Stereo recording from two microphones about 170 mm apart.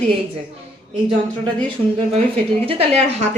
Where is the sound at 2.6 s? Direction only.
35° right (ahead or behind).